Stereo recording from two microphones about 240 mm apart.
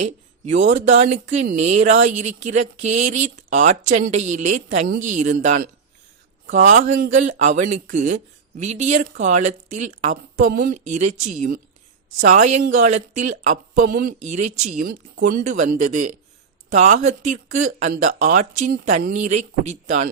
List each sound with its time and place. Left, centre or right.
0.0 s speech: right